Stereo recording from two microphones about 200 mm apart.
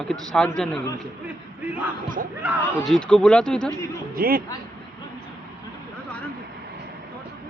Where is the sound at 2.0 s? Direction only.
40° right (ahead or behind).